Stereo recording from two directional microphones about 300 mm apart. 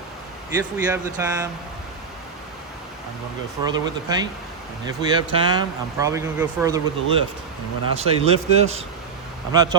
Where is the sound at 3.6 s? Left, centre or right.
Centre.